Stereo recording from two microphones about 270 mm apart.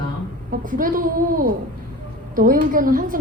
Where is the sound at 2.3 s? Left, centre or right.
Right.